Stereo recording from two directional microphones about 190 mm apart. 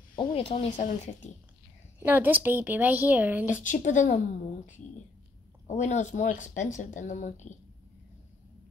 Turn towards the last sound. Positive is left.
turn(degrees=40)  # may be behind; listen again after turning